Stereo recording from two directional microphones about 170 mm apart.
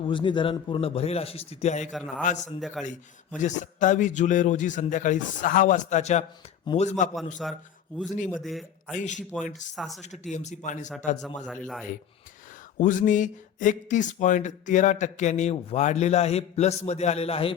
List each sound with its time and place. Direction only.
0.0 s speech: 30° left (ahead or behind)
1.9 s a man's voice: centre (ahead or behind)
2.8 s speech: 45° left (ahead or behind)
7.4 s a man's voice: centre (ahead or behind)
9.0 s speech: 45° left (ahead or behind)
9.7 s a man's voice: centre (ahead or behind)
10.0 s speech: 45° left (ahead or behind)
11.4 s a man's voice: 5° left (ahead or behind)
12.8 s speech: 50° left (ahead or behind)